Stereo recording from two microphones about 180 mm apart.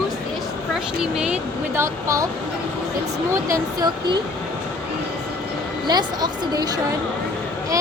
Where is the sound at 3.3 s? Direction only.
15° right (ahead or behind).